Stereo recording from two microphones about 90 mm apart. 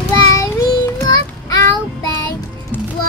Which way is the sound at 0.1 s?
40° left (ahead or behind).